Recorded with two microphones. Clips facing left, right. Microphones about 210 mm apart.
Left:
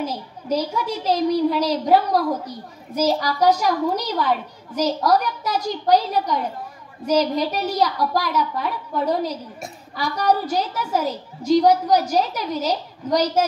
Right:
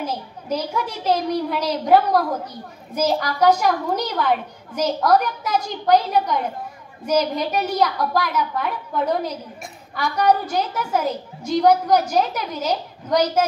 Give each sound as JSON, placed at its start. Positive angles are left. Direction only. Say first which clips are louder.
{"t": 0.0, "sound": "a woman's voice", "louder": "left 1 dB", "side_deg": -55}